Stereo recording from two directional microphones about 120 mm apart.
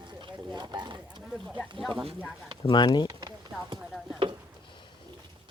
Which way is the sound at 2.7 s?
40° left (ahead or behind).